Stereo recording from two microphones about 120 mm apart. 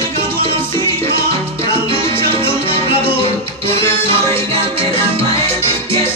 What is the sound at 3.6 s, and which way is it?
Music, 20° left (ahead or behind).